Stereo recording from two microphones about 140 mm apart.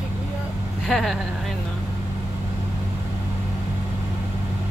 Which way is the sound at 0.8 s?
5° left (ahead or behind).